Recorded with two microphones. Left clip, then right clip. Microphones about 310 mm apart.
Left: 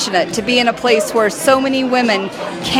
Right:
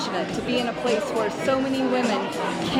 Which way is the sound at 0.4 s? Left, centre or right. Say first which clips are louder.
Left 9 dB; left.